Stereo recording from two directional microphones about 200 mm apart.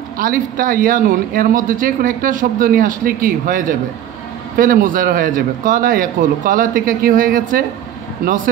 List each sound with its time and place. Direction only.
0.2 s speech: 45° right (ahead or behind)